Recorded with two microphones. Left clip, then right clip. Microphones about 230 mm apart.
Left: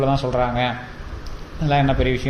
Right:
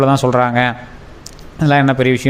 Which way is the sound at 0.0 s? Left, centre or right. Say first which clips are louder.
Right 7 dB; right.